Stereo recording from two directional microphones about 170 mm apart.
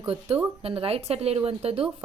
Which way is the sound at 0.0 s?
35° right (ahead or behind).